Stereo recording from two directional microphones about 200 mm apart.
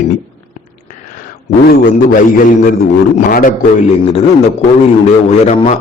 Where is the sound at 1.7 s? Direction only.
45° left (ahead or behind).